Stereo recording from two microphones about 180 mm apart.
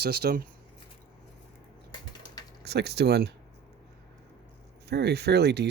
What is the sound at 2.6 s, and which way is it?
Speech, 65° right (ahead or behind).